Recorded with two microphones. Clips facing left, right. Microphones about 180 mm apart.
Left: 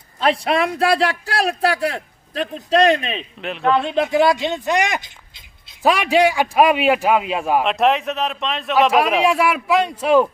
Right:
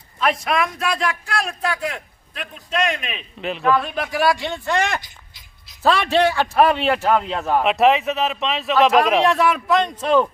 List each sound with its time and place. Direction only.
0.2 s speech: 30° left (ahead or behind)
3.3 s speech: centre (ahead or behind)
3.6 s speech: 25° left (ahead or behind); by 7.6 s 10° left (ahead or behind)
7.6 s speech: centre (ahead or behind)